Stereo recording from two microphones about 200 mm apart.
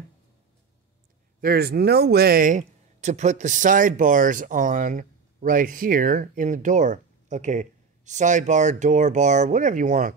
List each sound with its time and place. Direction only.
1.4 s speech: 50° right (ahead or behind)